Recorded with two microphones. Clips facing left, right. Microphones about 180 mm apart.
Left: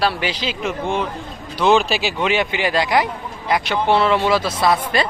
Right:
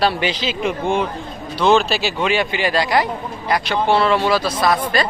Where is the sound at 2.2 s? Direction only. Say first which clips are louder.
Even; 15° left (ahead or behind).